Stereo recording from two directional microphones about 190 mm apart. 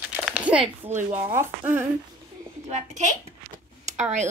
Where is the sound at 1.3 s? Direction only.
10° right (ahead or behind).